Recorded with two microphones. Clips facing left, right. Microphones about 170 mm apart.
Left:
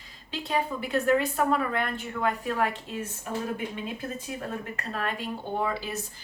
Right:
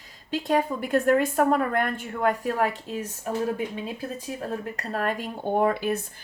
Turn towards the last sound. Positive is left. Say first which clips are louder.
# right 7 dB
turn(degrees=-55)  # may be behind; listen again after turning